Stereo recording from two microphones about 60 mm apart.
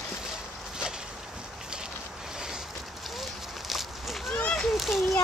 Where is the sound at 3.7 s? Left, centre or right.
Centre.